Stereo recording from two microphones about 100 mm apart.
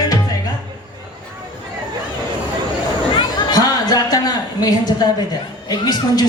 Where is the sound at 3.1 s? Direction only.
40° left (ahead or behind).